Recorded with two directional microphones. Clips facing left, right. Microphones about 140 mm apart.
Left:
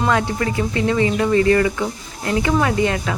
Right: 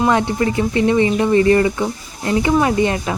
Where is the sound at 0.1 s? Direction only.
20° right (ahead or behind).